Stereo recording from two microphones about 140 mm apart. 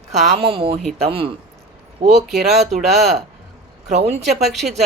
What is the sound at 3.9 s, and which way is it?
Speech, 50° right (ahead or behind).